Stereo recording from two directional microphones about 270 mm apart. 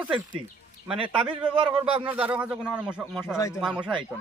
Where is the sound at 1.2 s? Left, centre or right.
Centre.